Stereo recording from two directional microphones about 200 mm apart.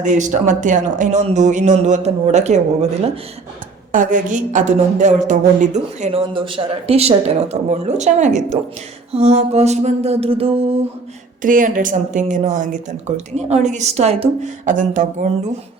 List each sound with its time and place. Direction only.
0.0 s a woman's voice: 40° right (ahead or behind)
3.9 s a woman's voice: 40° right (ahead or behind)
11.4 s a woman's voice: 40° right (ahead or behind)